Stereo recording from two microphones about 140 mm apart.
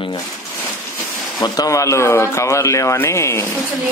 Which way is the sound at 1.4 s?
25° left (ahead or behind).